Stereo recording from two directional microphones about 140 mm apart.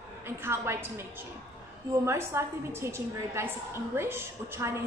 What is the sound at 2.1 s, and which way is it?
A woman's voice, 20° right (ahead or behind).